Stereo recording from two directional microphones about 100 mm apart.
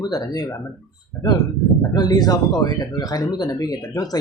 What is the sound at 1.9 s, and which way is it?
Speech, 40° left (ahead or behind).